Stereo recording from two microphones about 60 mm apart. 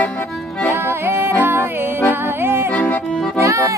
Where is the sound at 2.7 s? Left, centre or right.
Left.